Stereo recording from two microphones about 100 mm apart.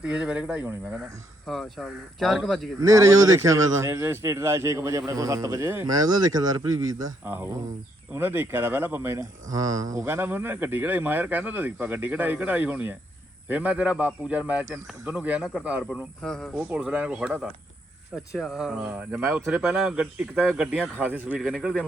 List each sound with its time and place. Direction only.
0.0 s a man's voice: 10° right (ahead or behind)
1.5 s speech: centre (ahead or behind)
2.8 s speech: 30° right (ahead or behind)
7.2 s speech: 20° right (ahead or behind)
9.5 s speech: 35° right (ahead or behind)
10.1 s a man's voice: 20° right (ahead or behind)
16.2 s speech: 5° left (ahead or behind)
16.6 s a man's voice: 10° right (ahead or behind)
19.4 s speech: 25° right (ahead or behind)
19.7 s a man's voice: centre (ahead or behind)
21.0 s a man's voice: 15° right (ahead or behind)
21.4 s speech: 5° right (ahead or behind)